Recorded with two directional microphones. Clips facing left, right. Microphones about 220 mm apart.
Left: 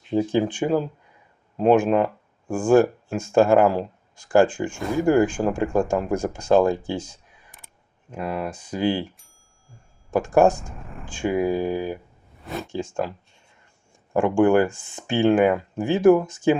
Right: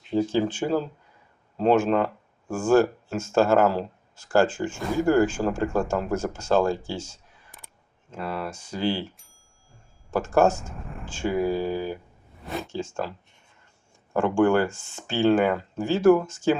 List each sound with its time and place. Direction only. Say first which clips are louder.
0.2 s speech: left 2 dB; 15° left (ahead or behind)
10.1 s speech: left 3 dB; 15° left (ahead or behind)
10.6 s speech: even; centre (ahead or behind)
11.0 s speech: left 2 dB; 15° left (ahead or behind)
12.5 s speech: left 1 dB; centre (ahead or behind)
12.7 s speech: left 7 dB; 15° left (ahead or behind)